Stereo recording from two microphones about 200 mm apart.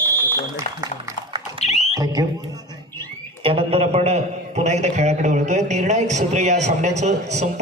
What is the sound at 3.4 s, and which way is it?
A man's voice, 30° right (ahead or behind).